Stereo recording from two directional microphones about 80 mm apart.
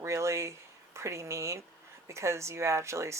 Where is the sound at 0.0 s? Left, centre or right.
Right.